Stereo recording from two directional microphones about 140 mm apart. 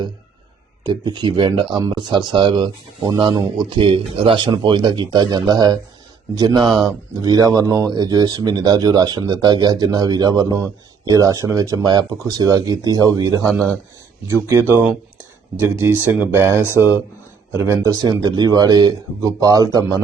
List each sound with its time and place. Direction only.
0.9 s speech: 30° right (ahead or behind)